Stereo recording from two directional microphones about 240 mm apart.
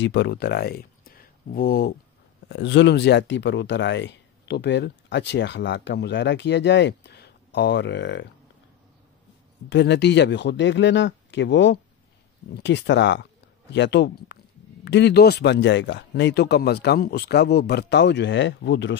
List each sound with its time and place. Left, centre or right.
0.0 s speech: left
9.7 s speech: left